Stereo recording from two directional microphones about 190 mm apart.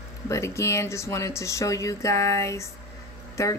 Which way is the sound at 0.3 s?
15° left (ahead or behind).